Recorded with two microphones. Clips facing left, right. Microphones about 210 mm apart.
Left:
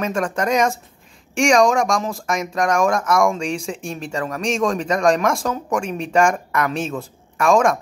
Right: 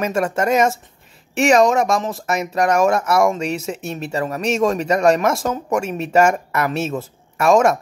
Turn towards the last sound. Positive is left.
turn(degrees=-5)  # may be behind; listen again after turning